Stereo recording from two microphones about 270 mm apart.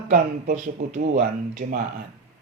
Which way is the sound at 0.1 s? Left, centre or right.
Right.